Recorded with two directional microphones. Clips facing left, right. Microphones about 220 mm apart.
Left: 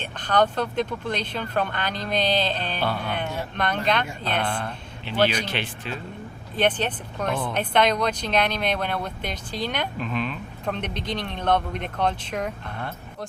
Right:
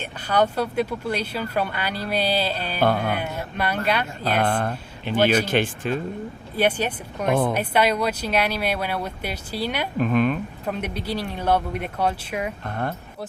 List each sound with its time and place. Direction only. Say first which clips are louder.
0.0 s speech: even; 10° right (ahead or behind)
2.8 s speech: right 8 dB; 50° right (ahead or behind)
3.2 s speech: even; 10° right (ahead or behind)
4.4 s speech: right 6 dB; 50° right (ahead or behind)
5.1 s speech: right 3 dB; 10° right (ahead or behind)
5.5 s speech: right 8 dB; 50° right (ahead or behind)
6.6 s speech: right 1 dB; 10° right (ahead or behind)
7.3 s speech: right 7 dB; 55° right (ahead or behind)
7.5 s speech: right 1 dB; 10° right (ahead or behind)
10.0 s speech: right 8 dB; 50° right (ahead or behind)
10.7 s speech: right 1 dB; 10° right (ahead or behind)
12.6 s speech: right 6 dB; 45° right (ahead or behind)